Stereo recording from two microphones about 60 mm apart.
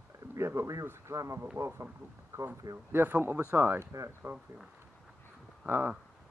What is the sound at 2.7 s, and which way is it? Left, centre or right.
Speech, right.